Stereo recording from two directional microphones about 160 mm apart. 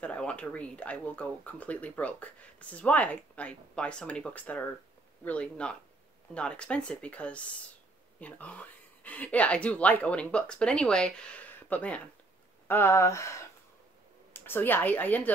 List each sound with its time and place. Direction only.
0.0 s speech: 5° left (ahead or behind)